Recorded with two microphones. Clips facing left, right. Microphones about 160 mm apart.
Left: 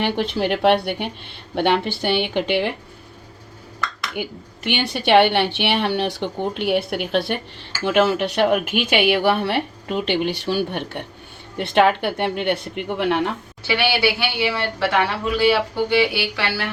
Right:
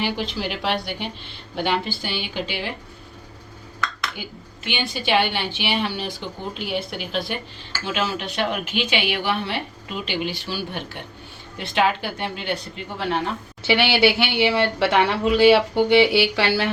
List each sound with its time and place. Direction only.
0.0 s a woman's voice: 55° left (ahead or behind)
4.1 s a woman's voice: 60° left (ahead or behind)
13.7 s speech: 25° right (ahead or behind)